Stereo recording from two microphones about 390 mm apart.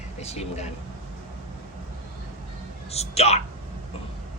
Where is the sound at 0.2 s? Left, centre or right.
Centre.